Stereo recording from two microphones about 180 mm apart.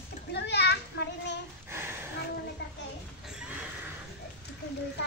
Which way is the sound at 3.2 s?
5° right (ahead or behind).